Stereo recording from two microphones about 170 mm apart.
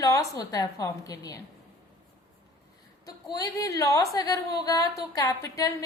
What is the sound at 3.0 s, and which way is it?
A woman's voice, 20° left (ahead or behind).